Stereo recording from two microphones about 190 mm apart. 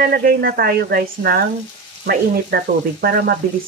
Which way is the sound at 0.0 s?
50° right (ahead or behind).